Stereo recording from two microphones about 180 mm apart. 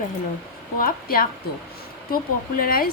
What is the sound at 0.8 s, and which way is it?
Speech, 55° left (ahead or behind).